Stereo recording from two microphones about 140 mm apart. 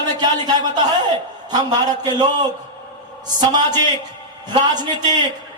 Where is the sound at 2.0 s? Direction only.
30° right (ahead or behind).